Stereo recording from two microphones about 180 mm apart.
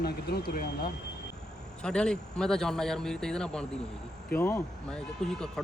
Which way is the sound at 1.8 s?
5° left (ahead or behind).